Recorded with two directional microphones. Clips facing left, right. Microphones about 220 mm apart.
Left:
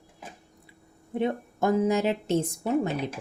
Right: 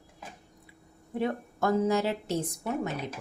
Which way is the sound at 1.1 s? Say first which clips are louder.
Left 3 dB; 20° left (ahead or behind).